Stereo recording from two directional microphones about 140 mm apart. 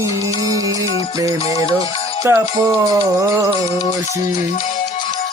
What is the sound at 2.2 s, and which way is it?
Speech, 25° right (ahead or behind).